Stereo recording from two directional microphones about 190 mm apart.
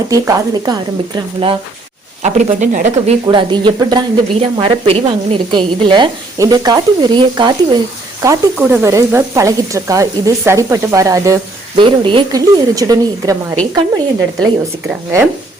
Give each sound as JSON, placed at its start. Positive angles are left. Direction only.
{"t": 0.1, "sound": "a woman's voice", "side_deg": -20}
{"t": 2.2, "sound": "speech", "side_deg": -40}
{"t": 3.2, "sound": "a woman's voice", "side_deg": -25}
{"t": 8.2, "sound": "a woman's voice", "side_deg": -15}
{"t": 14.8, "sound": "speech", "side_deg": -10}